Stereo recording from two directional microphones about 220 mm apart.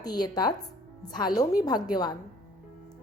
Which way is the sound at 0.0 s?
20° left (ahead or behind).